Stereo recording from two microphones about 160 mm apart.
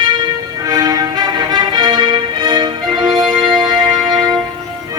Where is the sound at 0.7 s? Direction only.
25° right (ahead or behind).